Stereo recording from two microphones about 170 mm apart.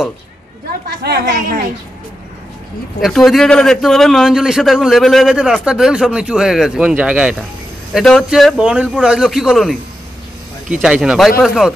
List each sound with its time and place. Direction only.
1.0 s a woman's voice: 70° right (ahead or behind)
3.0 s a man's voice: centre (ahead or behind)